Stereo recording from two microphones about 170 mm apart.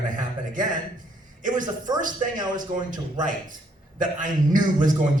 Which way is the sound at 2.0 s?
50° right (ahead or behind).